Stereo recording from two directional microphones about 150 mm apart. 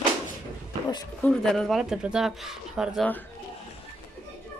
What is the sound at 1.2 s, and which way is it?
Speech, 5° left (ahead or behind).